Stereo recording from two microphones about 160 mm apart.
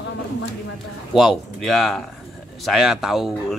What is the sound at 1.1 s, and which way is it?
A man's voice, centre (ahead or behind).